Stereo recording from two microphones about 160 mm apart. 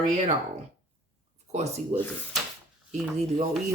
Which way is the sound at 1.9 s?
50° right (ahead or behind).